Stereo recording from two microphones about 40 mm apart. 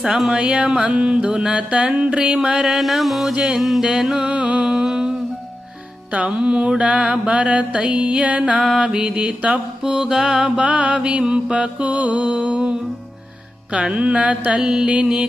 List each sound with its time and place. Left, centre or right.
0.3 s mantra: right
1.5 s mantra: right
2.6 s music: centre
3.3 s mantra: right
3.6 s music: centre
3.8 s mantra: centre
4.3 s mantra: right
4.7 s humming: centre
6.1 s mantra: right
9.8 s mantra: centre
10.7 s mantra: right
13.7 s mantra: right
14.6 s mantra: centre